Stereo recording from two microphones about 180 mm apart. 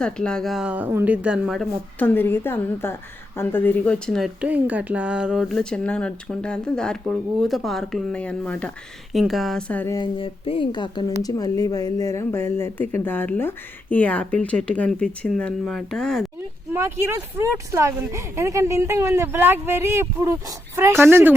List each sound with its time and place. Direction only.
0.0 s speech: 5° left (ahead or behind)
2.0 s speech: 10° left (ahead or behind)
9.9 s speech: 25° left (ahead or behind); by 16.2 s centre (ahead or behind)
16.7 s speech: 15° right (ahead or behind)